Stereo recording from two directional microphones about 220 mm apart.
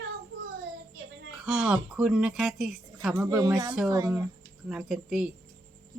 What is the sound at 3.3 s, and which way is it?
Speech, 15° right (ahead or behind).